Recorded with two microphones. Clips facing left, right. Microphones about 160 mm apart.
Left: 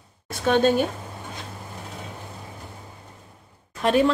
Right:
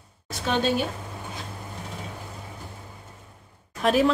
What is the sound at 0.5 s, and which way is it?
Speech, 50° left (ahead or behind).